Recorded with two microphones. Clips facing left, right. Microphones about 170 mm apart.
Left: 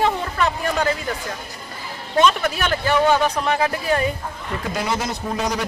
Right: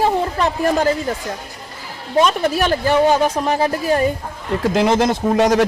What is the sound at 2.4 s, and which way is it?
A man's voice, 35° right (ahead or behind).